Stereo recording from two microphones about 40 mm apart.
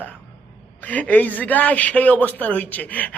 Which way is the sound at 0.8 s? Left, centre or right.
Left.